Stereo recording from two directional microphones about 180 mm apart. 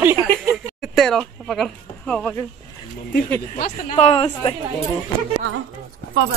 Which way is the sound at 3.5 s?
45° left (ahead or behind).